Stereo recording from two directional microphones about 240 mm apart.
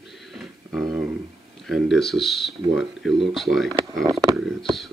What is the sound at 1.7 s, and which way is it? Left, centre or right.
Speech, centre.